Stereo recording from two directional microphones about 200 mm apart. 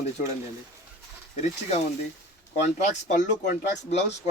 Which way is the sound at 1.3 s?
35° left (ahead or behind).